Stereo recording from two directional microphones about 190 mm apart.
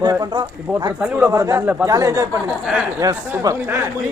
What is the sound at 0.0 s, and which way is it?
Speech, 20° right (ahead or behind).